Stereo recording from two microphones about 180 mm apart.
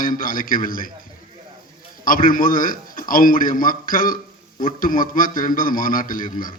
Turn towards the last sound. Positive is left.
turn(degrees=50)  # may be behind; listen again after turning